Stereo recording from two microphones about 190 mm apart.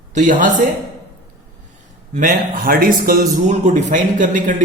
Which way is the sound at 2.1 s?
45° right (ahead or behind).